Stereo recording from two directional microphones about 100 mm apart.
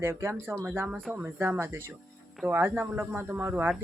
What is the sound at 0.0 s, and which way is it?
Speech, 25° right (ahead or behind).